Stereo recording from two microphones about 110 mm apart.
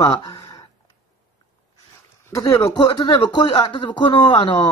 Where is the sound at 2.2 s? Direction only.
30° left (ahead or behind).